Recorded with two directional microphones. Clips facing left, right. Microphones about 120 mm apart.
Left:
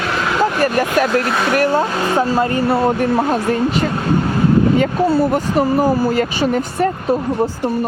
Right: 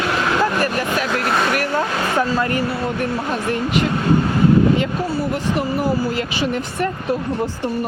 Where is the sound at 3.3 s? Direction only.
40° left (ahead or behind).